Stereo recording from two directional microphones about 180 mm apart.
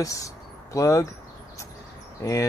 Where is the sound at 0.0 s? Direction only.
20° left (ahead or behind).